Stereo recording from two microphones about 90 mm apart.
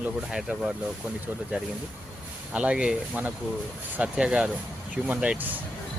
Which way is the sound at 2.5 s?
10° right (ahead or behind).